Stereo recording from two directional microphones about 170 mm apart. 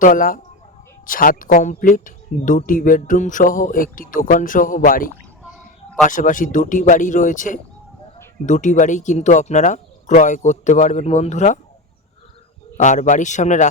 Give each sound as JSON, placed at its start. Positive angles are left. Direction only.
{"t": 0.0, "sound": "speech", "side_deg": 55}
{"t": 12.7, "sound": "speech", "side_deg": 45}